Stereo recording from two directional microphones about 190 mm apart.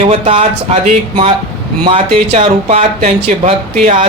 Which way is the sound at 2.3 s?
30° right (ahead or behind).